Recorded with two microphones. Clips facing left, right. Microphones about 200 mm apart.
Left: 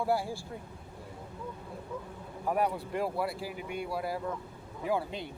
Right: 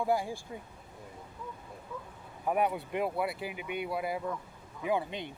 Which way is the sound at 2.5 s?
5° right (ahead or behind).